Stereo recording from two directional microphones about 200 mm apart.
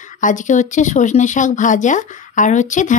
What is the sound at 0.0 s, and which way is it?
A woman's voice, 40° left (ahead or behind).